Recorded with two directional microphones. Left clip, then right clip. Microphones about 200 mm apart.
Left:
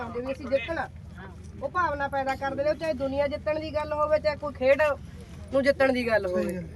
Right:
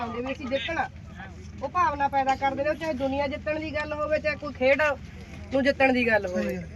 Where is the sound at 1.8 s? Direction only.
5° right (ahead or behind).